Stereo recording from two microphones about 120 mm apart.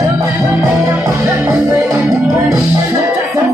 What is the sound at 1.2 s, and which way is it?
Music, 10° right (ahead or behind).